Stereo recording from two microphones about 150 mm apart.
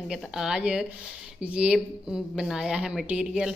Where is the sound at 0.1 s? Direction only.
5° right (ahead or behind).